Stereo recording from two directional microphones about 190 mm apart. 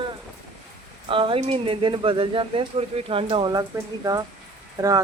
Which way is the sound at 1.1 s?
25° right (ahead or behind).